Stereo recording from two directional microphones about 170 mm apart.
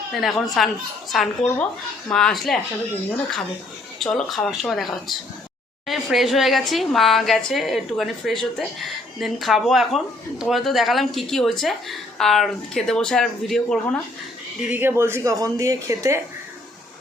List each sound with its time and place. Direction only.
0.1 s a woman's voice: centre (ahead or behind)
4.0 s a woman's voice: centre (ahead or behind)
5.9 s a woman's voice: centre (ahead or behind)
14.7 s speech: 15° right (ahead or behind)